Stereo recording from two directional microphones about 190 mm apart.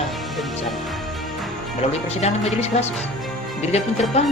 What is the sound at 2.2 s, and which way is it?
Speech, 35° left (ahead or behind).